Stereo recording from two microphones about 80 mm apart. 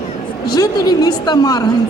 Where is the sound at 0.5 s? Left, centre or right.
Left.